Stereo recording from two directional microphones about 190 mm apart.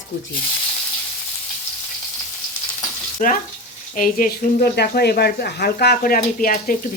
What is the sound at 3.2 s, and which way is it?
Speech, 45° left (ahead or behind).